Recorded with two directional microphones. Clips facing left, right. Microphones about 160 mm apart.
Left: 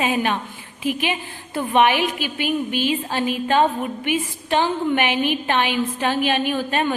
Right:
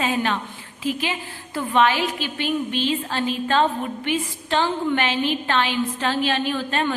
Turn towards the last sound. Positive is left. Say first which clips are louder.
# left 2 dB
turn(degrees=15)  # may be behind; listen again after turning